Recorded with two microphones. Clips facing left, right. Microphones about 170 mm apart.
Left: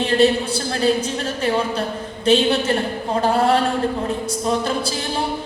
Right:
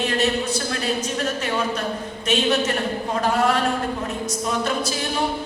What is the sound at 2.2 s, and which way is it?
A man's voice, 30° left (ahead or behind).